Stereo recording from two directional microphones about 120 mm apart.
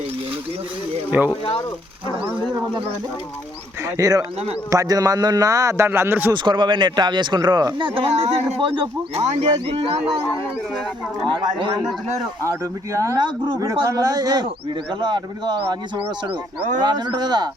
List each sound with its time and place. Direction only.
1.2 s speech: 10° right (ahead or behind)
3.8 s speech: 30° right (ahead or behind)
6.3 s speech: 40° right (ahead or behind)
11.3 s speech: 40° right (ahead or behind)
12.5 s speech: 25° right (ahead or behind)
13.1 s speech: 40° right (ahead or behind)